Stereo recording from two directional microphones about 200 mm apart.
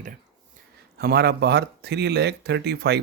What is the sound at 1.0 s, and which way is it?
Speech, 55° right (ahead or behind).